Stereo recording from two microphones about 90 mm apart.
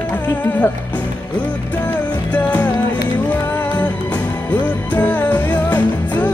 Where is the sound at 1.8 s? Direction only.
15° left (ahead or behind).